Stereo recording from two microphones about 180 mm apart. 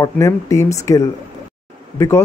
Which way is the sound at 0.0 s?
15° left (ahead or behind).